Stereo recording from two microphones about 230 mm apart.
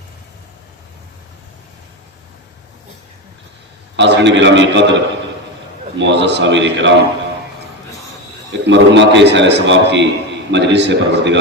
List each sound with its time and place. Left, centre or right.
3.9 s a man's voice: right
8.6 s a man's voice: right